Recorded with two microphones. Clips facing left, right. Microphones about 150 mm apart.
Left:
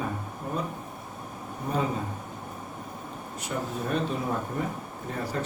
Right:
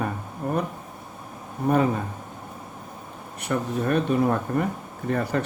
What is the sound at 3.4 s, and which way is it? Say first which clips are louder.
Speech: right 7 dB; 65° right (ahead or behind).